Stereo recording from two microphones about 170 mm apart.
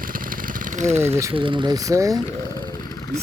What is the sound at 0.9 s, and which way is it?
Speech, 15° right (ahead or behind).